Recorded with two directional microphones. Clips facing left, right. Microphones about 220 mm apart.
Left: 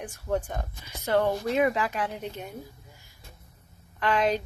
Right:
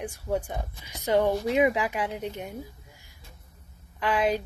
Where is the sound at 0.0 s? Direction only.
10° right (ahead or behind).